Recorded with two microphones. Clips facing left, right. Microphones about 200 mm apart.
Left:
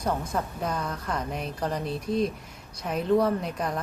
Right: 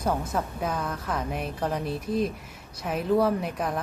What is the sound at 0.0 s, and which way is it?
A woman's voice, 5° right (ahead or behind).